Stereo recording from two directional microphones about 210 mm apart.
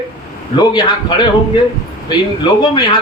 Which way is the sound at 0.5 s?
20° left (ahead or behind).